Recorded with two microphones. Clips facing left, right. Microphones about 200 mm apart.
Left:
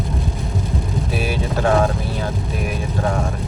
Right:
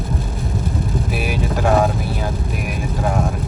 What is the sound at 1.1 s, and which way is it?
Vehicle, 10° right (ahead or behind).